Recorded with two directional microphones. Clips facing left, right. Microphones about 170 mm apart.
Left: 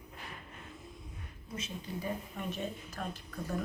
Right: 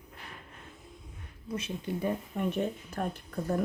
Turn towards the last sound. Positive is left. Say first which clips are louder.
# right 6 dB
turn(degrees=-55)  # may be behind; listen again after turning